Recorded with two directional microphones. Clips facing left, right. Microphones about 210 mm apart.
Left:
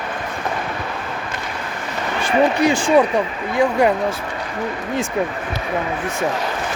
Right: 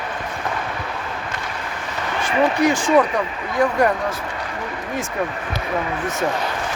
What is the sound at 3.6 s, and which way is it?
Speech, 10° left (ahead or behind).